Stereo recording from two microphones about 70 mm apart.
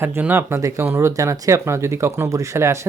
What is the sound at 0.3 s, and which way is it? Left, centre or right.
Speech, right.